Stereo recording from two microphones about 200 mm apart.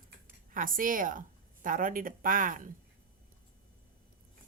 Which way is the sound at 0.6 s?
45° right (ahead or behind).